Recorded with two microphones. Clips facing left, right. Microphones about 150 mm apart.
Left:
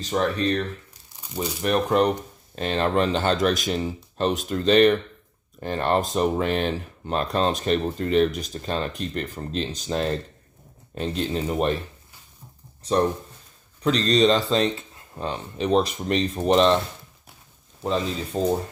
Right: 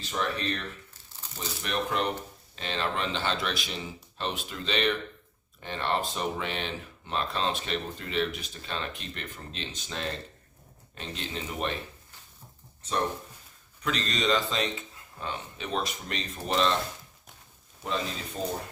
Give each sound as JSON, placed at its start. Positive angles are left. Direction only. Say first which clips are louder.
{"t": 0.0, "sound": "speech", "louder": "left 8 dB", "side_deg": 40}
{"t": 13.8, "sound": "speech", "louder": "left 10 dB", "side_deg": 35}
{"t": 18.3, "sound": "speech", "louder": "left 10 dB", "side_deg": 45}